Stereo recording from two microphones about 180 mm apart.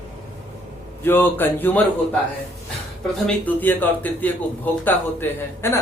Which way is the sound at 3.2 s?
10° left (ahead or behind).